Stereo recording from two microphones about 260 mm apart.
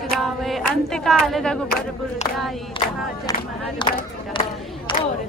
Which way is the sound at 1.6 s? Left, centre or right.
Left.